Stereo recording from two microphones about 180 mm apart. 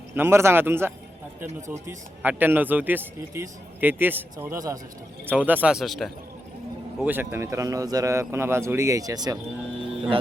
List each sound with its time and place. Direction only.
0.1 s speech: 15° right (ahead or behind)
7.0 s speech: 10° right (ahead or behind)